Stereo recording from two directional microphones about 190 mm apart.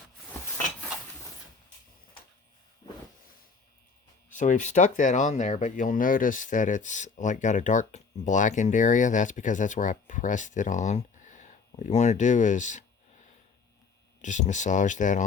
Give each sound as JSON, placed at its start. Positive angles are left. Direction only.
{"t": 4.4, "sound": "speech", "side_deg": 40}
{"t": 14.2, "sound": "speech", "side_deg": 40}